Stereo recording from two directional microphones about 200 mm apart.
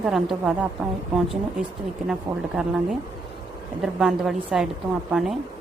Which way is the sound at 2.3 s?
20° right (ahead or behind).